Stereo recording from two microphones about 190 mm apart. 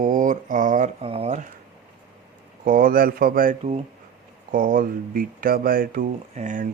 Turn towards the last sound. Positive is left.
turn(degrees=-40)  # may be behind; listen again after turning